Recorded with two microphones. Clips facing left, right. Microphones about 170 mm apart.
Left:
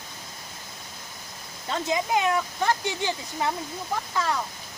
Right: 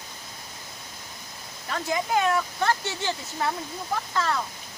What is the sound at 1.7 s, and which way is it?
Speech, 20° left (ahead or behind).